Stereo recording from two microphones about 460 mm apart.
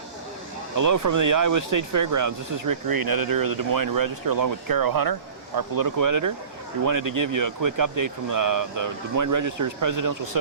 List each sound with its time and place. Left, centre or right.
0.8 s speech: right